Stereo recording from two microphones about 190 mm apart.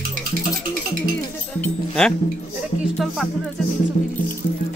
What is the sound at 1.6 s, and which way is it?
Music, 5° left (ahead or behind).